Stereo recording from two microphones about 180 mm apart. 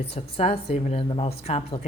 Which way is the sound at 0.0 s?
35° left (ahead or behind).